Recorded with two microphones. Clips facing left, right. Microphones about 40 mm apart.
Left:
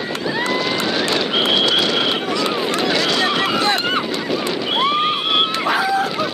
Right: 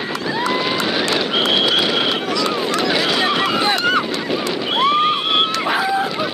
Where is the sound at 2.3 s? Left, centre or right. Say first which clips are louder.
Even; centre.